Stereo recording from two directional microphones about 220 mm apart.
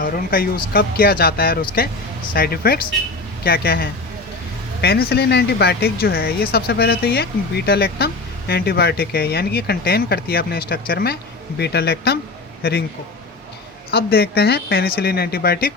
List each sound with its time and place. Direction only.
0.0 s speech: 40° left (ahead or behind)
13.9 s speech: 45° left (ahead or behind)